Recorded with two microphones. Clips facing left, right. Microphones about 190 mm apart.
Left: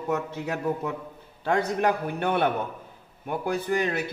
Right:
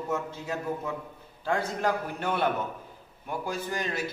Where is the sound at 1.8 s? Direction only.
60° left (ahead or behind).